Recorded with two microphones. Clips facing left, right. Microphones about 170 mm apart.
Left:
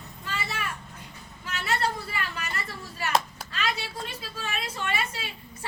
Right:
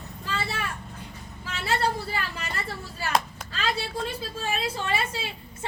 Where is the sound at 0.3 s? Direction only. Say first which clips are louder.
Right 3 dB; 30° right (ahead or behind).